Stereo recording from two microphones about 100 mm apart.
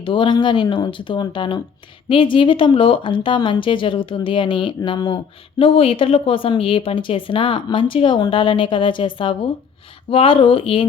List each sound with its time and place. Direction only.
0.0 s speech: 55° left (ahead or behind)